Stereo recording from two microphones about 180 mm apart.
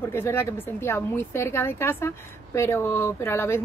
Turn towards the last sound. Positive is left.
turn(degrees=10)  # may be behind; listen again after turning